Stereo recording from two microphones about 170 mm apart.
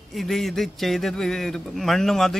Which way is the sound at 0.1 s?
Centre (ahead or behind).